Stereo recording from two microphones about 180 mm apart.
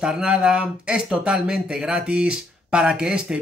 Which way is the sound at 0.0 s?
5° right (ahead or behind).